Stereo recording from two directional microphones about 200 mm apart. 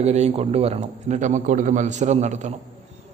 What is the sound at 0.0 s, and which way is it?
A man's voice, 35° right (ahead or behind).